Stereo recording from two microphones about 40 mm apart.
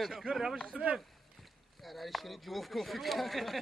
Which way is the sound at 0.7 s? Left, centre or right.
Right.